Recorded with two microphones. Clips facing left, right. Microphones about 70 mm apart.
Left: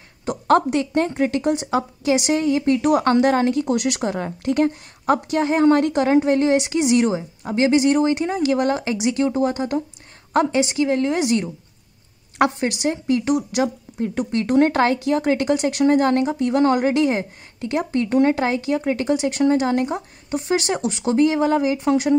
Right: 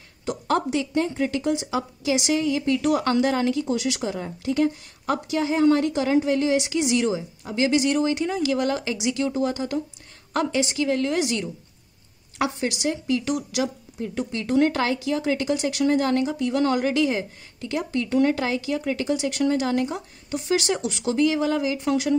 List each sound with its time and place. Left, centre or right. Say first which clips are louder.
0.5 s a woman's voice: left 7 dB; left
3.6 s a woman's voice: left 4 dB; left
5.0 s a woman's voice: left 5 dB; left
12.4 s a woman's voice: left 6 dB; left